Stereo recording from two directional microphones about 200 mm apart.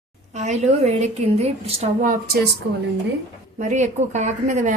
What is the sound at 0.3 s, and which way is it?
Speech, 35° right (ahead or behind).